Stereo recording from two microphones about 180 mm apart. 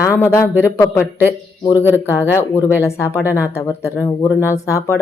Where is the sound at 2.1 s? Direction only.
15° left (ahead or behind).